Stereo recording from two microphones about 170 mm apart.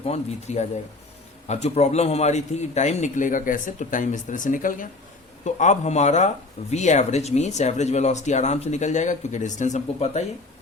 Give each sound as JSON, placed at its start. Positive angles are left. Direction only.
{"t": 0.0, "sound": "speech", "side_deg": 40}